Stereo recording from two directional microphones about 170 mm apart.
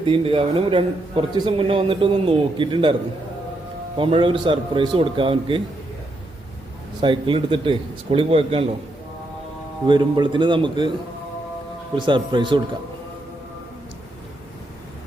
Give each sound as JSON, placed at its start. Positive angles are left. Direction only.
{"t": 0.0, "sound": "a man's voice", "side_deg": -30}
{"t": 3.9, "sound": "a man's voice", "side_deg": -30}
{"t": 7.0, "sound": "a man's voice", "side_deg": -30}
{"t": 9.8, "sound": "a man's voice", "side_deg": -30}
{"t": 11.9, "sound": "a man's voice", "side_deg": -30}